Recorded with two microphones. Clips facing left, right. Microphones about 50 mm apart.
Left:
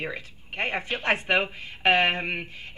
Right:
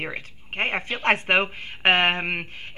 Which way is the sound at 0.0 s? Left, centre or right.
Right.